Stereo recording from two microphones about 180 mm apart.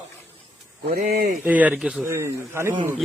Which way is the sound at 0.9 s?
50° right (ahead or behind).